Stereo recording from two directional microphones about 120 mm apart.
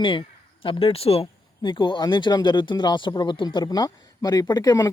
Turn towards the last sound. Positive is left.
turn(degrees=30)  # may be behind; listen again after turning